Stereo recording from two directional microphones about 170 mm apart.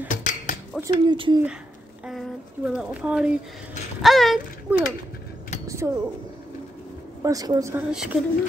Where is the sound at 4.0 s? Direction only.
Centre (ahead or behind).